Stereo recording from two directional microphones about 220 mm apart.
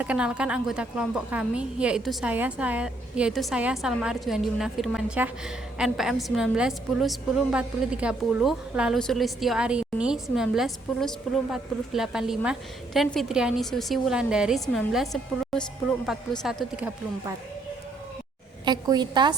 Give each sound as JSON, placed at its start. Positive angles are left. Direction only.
{"t": 0.0, "sound": "a woman's voice", "side_deg": -5}
{"t": 18.6, "sound": "a woman's voice", "side_deg": -20}